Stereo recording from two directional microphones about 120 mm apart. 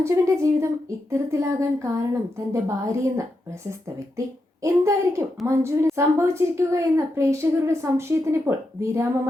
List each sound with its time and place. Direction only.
0.0 s a woman's voice: 20° right (ahead or behind)
4.6 s a woman's voice: 25° right (ahead or behind)